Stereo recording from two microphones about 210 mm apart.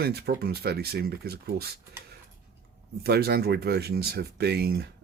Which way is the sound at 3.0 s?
45° right (ahead or behind).